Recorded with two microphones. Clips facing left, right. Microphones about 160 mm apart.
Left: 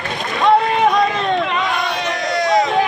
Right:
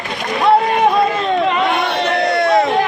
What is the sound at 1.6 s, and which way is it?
Crowd, 60° right (ahead or behind).